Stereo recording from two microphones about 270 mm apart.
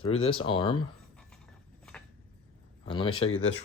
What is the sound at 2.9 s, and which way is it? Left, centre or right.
Speech, centre.